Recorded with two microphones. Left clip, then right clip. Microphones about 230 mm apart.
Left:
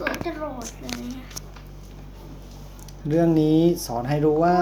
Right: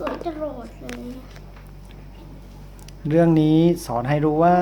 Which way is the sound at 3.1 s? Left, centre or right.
Right.